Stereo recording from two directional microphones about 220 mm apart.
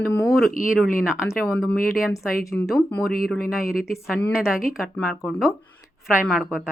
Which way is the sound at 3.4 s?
40° left (ahead or behind).